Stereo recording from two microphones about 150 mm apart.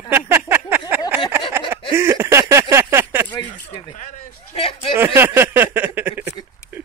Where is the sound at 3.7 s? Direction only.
30° left (ahead or behind).